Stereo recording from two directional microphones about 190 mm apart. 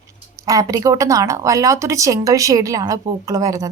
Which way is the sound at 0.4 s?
20° right (ahead or behind).